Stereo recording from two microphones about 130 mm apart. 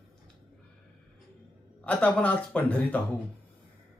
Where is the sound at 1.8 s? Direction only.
10° left (ahead or behind).